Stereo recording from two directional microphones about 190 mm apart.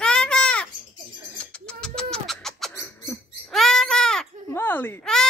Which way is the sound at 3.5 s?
Centre (ahead or behind).